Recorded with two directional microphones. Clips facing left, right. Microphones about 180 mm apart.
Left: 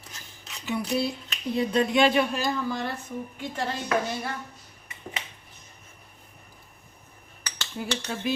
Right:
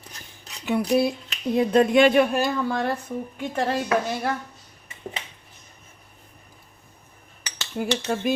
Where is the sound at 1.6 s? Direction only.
50° right (ahead or behind).